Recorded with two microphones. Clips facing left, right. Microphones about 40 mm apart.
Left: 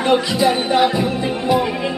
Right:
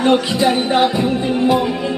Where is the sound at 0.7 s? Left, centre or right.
Centre.